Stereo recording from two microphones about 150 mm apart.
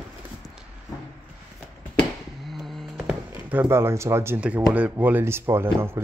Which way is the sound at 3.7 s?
15° right (ahead or behind).